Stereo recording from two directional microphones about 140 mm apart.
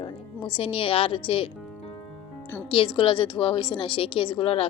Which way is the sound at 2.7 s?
40° left (ahead or behind).